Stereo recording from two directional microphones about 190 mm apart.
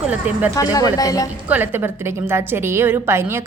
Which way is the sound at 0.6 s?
20° left (ahead or behind).